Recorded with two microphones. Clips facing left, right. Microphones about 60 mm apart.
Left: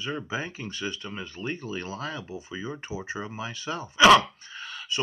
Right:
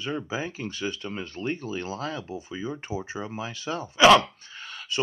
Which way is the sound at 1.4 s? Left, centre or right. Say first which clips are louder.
Right 3 dB; centre.